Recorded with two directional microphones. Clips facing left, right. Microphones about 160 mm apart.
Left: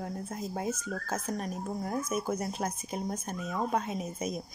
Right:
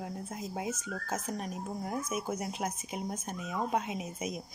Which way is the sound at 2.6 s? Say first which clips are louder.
Left 2 dB; 15° right (ahead or behind).